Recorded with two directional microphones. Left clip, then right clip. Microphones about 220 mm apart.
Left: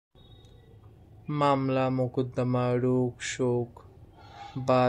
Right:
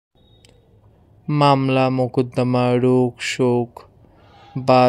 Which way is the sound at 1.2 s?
35° right (ahead or behind).